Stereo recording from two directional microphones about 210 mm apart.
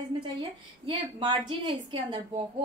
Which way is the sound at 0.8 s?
25° right (ahead or behind).